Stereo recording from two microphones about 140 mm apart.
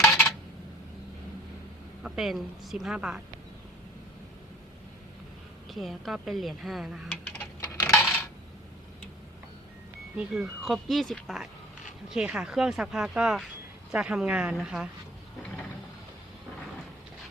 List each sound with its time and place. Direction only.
2.0 s speech: 5° right (ahead or behind)
5.7 s speech: centre (ahead or behind)
7.1 s a sound: 10° left (ahead or behind)
7.8 s coin: 20° left (ahead or behind)
10.2 s speech: 5° right (ahead or behind)